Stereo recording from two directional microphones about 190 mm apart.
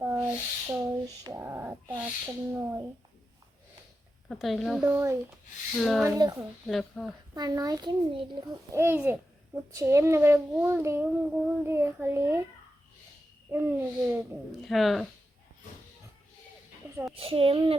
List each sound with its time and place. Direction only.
0.0 s a sound: 10° right (ahead or behind)
4.3 s a child's voice: centre (ahead or behind)
4.9 s a child's voice: 10° right (ahead or behind)
5.8 s a child's voice: centre (ahead or behind)
6.1 s a child's voice: 20° right (ahead or behind)
6.7 s a child's voice: centre (ahead or behind)
7.3 s a child's voice: 20° right (ahead or behind)
8.8 s a child's voice: 10° right (ahead or behind)
13.5 s a child's voice: 10° right (ahead or behind)
17.2 s a child's voice: 30° right (ahead or behind)